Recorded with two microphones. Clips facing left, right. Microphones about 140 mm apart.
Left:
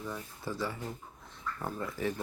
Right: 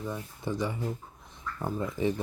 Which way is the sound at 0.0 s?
20° right (ahead or behind).